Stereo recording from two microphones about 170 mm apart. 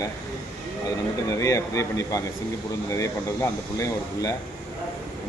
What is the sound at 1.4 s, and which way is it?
A man's voice, 20° left (ahead or behind).